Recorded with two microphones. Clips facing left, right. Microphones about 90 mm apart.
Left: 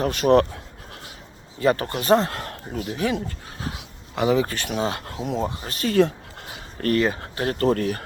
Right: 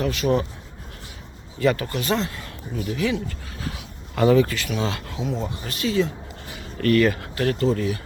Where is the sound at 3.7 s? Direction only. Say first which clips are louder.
Even; 20° left (ahead or behind).